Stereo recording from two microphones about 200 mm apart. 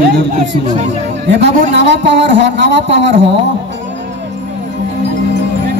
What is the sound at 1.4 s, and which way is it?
Speech, 60° right (ahead or behind).